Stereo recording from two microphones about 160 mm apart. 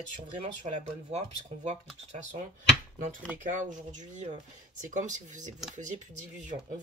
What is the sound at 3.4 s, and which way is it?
Speech, 55° right (ahead or behind).